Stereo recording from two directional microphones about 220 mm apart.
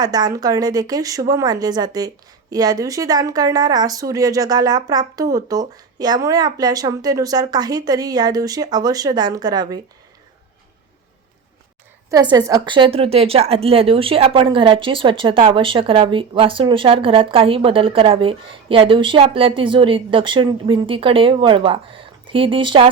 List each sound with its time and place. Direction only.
0.0 s speech: 15° right (ahead or behind)
12.1 s a woman's voice: 15° right (ahead or behind)